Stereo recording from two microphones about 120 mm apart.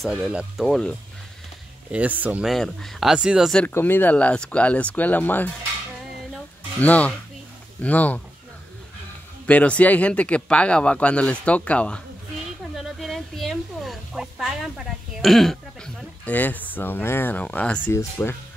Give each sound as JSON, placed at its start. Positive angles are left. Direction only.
{"t": 0.0, "sound": "speech", "side_deg": -5}
{"t": 0.7, "sound": "speech", "side_deg": 5}
{"t": 1.9, "sound": "speech", "side_deg": -15}
{"t": 2.4, "sound": "speech", "side_deg": 0}
{"t": 3.7, "sound": "speech", "side_deg": 15}
{"t": 6.8, "sound": "speech", "side_deg": 10}
{"t": 9.5, "sound": "speech", "side_deg": 10}
{"t": 12.7, "sound": "a sound", "side_deg": 0}
{"t": 16.3, "sound": "speech", "side_deg": 15}